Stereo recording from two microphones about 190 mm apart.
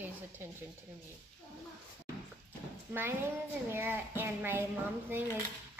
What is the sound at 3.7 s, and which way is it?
Speech, 10° right (ahead or behind).